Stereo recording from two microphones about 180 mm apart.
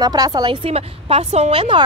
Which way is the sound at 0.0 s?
20° right (ahead or behind).